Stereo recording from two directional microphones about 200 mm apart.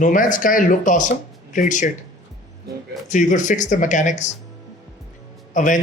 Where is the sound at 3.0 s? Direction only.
40° left (ahead or behind).